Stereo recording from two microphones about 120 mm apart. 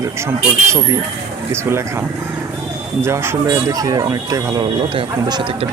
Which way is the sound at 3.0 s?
20° right (ahead or behind).